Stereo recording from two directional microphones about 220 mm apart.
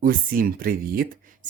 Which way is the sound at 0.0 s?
40° right (ahead or behind).